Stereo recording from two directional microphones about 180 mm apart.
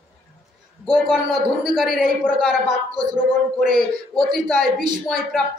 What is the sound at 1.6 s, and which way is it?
Speech, centre (ahead or behind).